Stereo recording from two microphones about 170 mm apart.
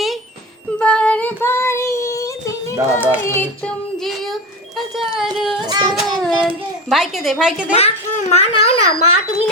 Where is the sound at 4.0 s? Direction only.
Centre (ahead or behind).